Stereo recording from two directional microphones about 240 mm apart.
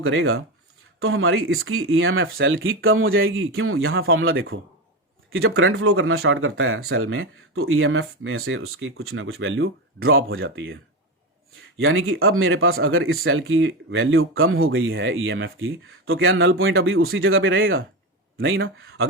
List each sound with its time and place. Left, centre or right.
0.0 s speech: right
11.8 s speech: right